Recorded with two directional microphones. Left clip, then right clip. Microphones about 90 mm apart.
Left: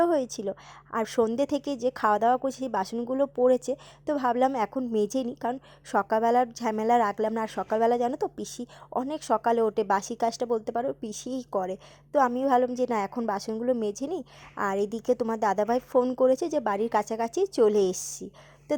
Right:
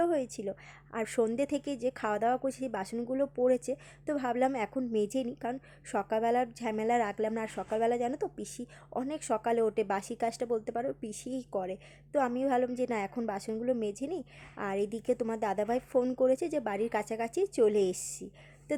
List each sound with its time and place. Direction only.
0.0 s a woman's voice: 50° left (ahead or behind)
0.9 s a woman's voice: 35° left (ahead or behind)